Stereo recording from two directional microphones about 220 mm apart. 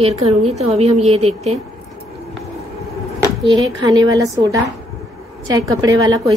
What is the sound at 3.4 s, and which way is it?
A woman's voice, 20° right (ahead or behind).